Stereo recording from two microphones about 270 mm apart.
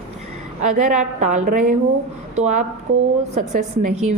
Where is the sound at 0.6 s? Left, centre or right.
Right.